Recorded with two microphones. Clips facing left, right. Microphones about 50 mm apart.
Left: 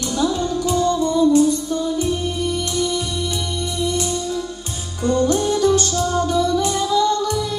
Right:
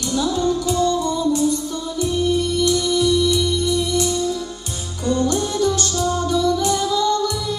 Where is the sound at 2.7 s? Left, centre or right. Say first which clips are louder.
Right 5 dB; left.